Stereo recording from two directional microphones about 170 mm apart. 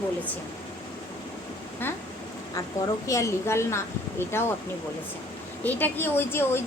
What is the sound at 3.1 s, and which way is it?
A woman's voice, 20° left (ahead or behind).